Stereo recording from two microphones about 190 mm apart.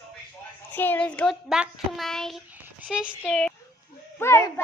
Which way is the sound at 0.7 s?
10° left (ahead or behind).